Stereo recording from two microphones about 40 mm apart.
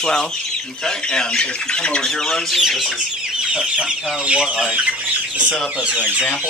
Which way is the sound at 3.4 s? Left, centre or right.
Right.